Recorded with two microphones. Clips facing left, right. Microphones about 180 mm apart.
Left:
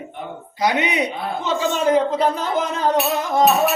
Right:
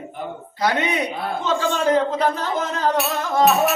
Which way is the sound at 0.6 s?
15° left (ahead or behind).